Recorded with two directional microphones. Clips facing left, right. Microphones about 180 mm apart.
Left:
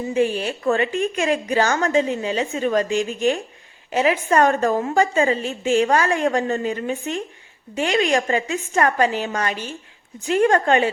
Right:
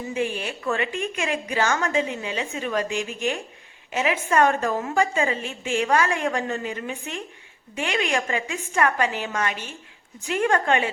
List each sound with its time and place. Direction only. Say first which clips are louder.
0.1 s a woman's voice: left 7 dB; 35° left (ahead or behind)